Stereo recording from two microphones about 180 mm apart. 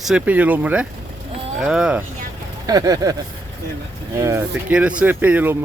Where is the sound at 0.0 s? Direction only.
5° right (ahead or behind).